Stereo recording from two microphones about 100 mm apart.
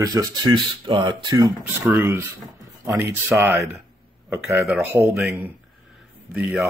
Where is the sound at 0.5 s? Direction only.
50° right (ahead or behind).